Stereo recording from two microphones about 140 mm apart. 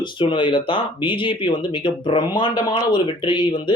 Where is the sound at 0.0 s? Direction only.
35° left (ahead or behind).